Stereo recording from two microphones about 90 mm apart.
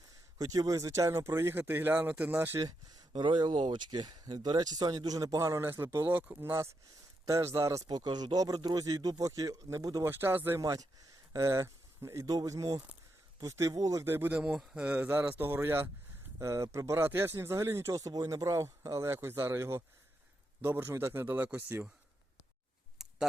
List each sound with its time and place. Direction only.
0.3 s speech: 45° right (ahead or behind); by 2.6 s 25° right (ahead or behind)
3.2 s speech: 55° right (ahead or behind); by 5.6 s 35° right (ahead or behind)
5.6 s speech: 25° right (ahead or behind)
7.9 s speech: 50° right (ahead or behind)
10.1 s speech: 25° right (ahead or behind)
10.6 s speech: 40° right (ahead or behind)
14.1 s speech: 20° right (ahead or behind)
14.5 s a man's voice: 5° right (ahead or behind)
14.9 s speech: 20° right (ahead or behind)
23.0 s a sound: 5° right (ahead or behind)